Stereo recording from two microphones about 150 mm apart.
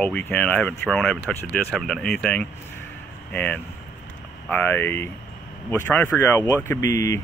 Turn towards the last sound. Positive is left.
turn(degrees=20)  # may be behind; listen again after turning